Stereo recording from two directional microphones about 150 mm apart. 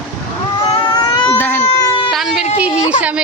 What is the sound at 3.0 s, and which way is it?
Speech, 10° right (ahead or behind).